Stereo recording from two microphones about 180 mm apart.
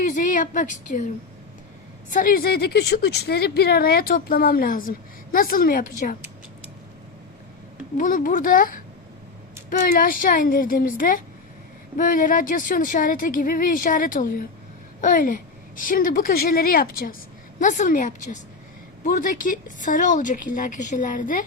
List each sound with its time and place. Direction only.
0.0 s a woman's voice: 45° left (ahead or behind)
2.1 s speech: 50° left (ahead or behind)
7.9 s speech: 50° left (ahead or behind)